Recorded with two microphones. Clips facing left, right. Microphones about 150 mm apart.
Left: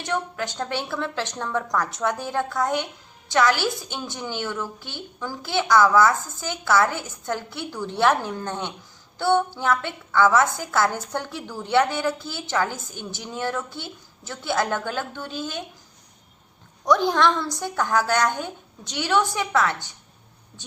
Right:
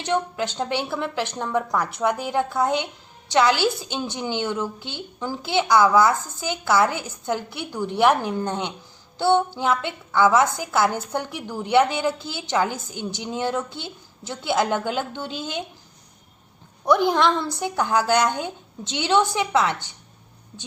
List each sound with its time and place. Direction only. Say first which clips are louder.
0.0 s a woman's voice: right 3 dB; 20° right (ahead or behind)
16.8 s a woman's voice: right 1 dB; 20° right (ahead or behind)